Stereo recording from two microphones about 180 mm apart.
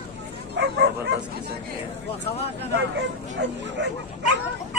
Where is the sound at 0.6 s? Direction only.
70° right (ahead or behind).